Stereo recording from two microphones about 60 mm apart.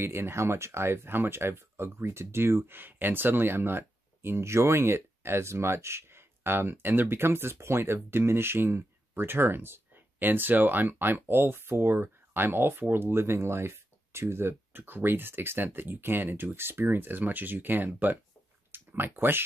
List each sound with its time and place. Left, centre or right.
0.0 s speech: right